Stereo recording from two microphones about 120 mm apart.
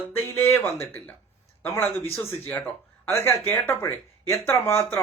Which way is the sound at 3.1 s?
20° left (ahead or behind).